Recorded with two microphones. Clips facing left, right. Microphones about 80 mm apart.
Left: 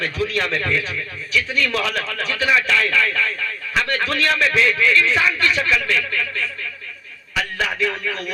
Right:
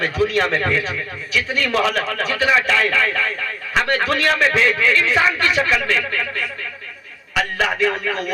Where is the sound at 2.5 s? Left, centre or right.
Right.